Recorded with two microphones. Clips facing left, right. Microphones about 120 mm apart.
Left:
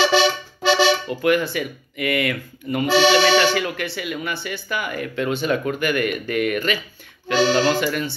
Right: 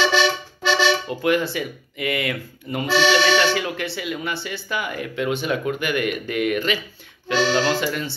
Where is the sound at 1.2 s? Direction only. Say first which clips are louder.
Left 2 dB; 25° right (ahead or behind).